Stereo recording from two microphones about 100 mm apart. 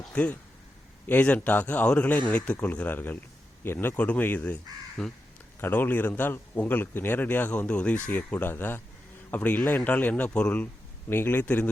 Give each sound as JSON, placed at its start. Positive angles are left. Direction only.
{"t": 0.1, "sound": "a man's voice", "side_deg": 15}
{"t": 5.5, "sound": "a man's voice", "side_deg": 20}